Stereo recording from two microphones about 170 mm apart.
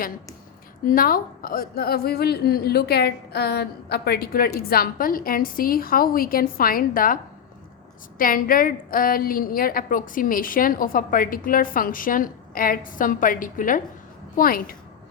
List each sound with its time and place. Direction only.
0.9 s a woman's voice: 60° left (ahead or behind)
8.2 s a woman's voice: 55° left (ahead or behind)